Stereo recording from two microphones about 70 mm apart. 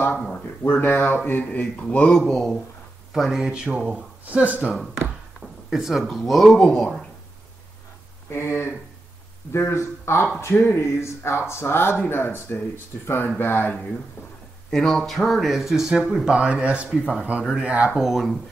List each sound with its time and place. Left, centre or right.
0.3 s speech: left; by 2.6 s centre
3.1 s speech: centre
3.8 s speech: centre
5.4 s speech: centre
8.3 s speech: left
14.7 s speech: centre